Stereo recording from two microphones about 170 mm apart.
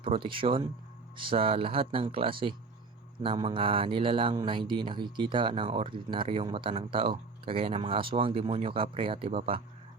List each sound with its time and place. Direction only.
0.0 s speech: 30° right (ahead or behind)